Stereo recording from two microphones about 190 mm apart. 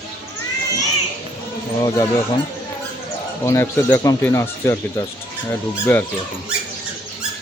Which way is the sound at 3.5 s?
15° left (ahead or behind).